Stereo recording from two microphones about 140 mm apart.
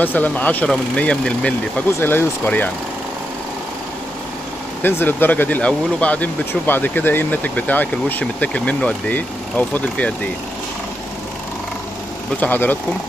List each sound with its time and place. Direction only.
0.0 s speech: 10° left (ahead or behind)
4.8 s speech: 15° left (ahead or behind)
12.4 s speech: 10° left (ahead or behind)